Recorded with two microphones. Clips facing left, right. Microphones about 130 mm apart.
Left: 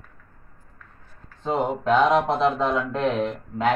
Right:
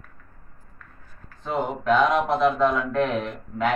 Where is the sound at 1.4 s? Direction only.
25° left (ahead or behind).